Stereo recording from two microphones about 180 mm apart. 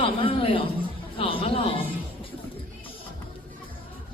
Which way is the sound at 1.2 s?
30° left (ahead or behind).